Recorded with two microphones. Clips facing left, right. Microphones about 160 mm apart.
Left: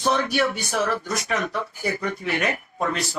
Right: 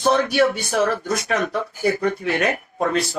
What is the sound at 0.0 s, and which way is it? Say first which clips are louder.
Speech: right 5 dB; 55° right (ahead or behind).